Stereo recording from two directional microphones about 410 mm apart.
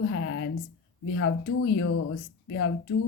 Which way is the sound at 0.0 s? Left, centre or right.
Left.